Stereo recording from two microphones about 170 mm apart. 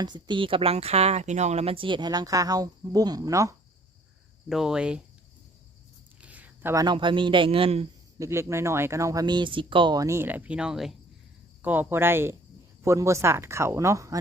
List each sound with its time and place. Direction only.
0.0 s speech: 25° right (ahead or behind)
4.4 s cricket: 5° right (ahead or behind)
6.1 s a sound: 10° right (ahead or behind)
6.8 s speech: 30° right (ahead or behind)
8.2 s speech: 15° right (ahead or behind)